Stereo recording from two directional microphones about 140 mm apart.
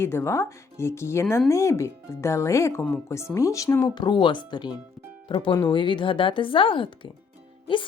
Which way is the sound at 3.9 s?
35° left (ahead or behind).